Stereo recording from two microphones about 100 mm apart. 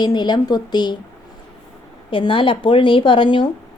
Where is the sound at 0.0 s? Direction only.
45° left (ahead or behind).